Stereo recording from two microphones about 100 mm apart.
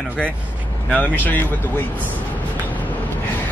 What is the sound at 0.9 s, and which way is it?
Speech, 15° left (ahead or behind).